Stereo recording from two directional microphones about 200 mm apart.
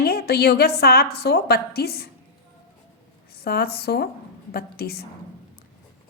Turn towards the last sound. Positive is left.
turn(degrees=50)  # may be behind; listen again after turning